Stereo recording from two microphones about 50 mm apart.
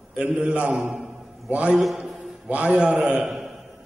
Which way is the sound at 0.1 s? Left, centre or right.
Centre.